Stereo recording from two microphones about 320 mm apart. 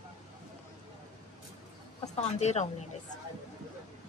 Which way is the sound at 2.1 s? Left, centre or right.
Left.